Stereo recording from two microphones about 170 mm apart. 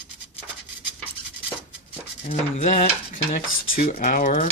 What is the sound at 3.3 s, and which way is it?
Speech, 60° left (ahead or behind).